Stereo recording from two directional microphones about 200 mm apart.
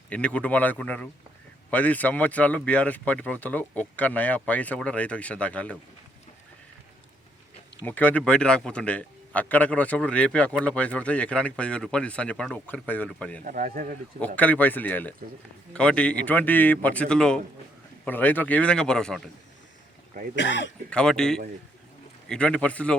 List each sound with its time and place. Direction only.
0.1 s speech: 5° left (ahead or behind)
7.9 s a man's voice: 10° left (ahead or behind)
13.4 s speech: 45° right (ahead or behind)
14.3 s a man's voice: 10° left (ahead or behind)
20.3 s speech: 60° left (ahead or behind)
20.9 s a man's voice: 5° left (ahead or behind)